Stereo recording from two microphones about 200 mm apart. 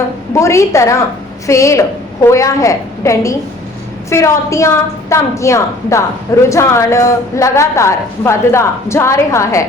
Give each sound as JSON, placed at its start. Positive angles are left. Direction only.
{"t": 0.3, "sound": "a woman's voice", "side_deg": 15}